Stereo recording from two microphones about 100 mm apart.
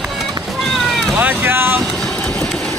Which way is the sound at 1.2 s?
15° right (ahead or behind).